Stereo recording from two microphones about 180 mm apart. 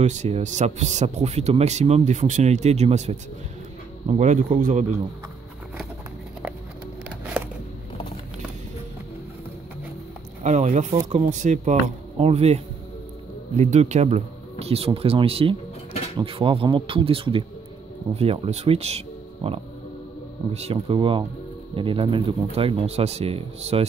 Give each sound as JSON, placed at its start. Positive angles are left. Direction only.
{"t": 0.0, "sound": "speech", "side_deg": -40}
{"t": 4.2, "sound": "speech", "side_deg": -45}
{"t": 7.3, "sound": "a sound", "side_deg": -5}
{"t": 10.4, "sound": "speech", "side_deg": -40}